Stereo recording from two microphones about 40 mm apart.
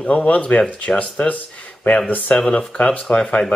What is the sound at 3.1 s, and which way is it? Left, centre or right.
Speech, left.